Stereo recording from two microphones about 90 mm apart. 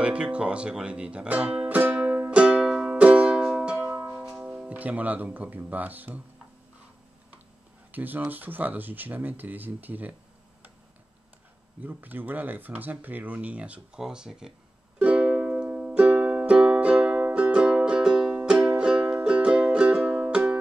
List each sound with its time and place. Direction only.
0.0 s speech: 10° right (ahead or behind)
1.7 s music: 15° right (ahead or behind)
4.0 s music: 20° right (ahead or behind)
4.3 s speech: 15° right (ahead or behind)
7.9 s speech: 20° right (ahead or behind)
11.8 s speech: 20° right (ahead or behind)
15.0 s music: 15° right (ahead or behind)